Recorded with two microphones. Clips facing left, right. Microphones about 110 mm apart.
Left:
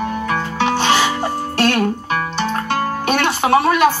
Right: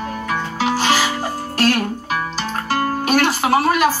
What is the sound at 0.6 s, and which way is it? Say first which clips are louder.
Music: left 2 dB; 25° left (ahead or behind).